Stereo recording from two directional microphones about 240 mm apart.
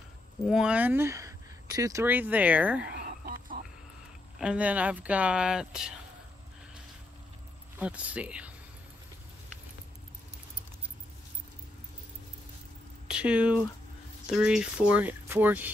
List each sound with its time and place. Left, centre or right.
0.5 s speech: centre
3.0 s a sound: right
4.4 s speech: centre
7.8 s speech: centre
13.1 s speech: centre